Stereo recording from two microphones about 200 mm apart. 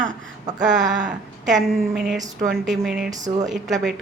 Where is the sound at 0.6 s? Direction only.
40° right (ahead or behind).